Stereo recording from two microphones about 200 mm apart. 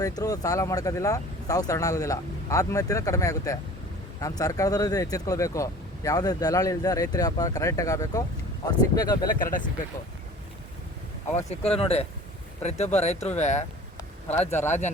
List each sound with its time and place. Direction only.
0.0 s speech: 15° left (ahead or behind)
9.4 s speech: 40° left (ahead or behind)
11.4 s speech: 30° left (ahead or behind)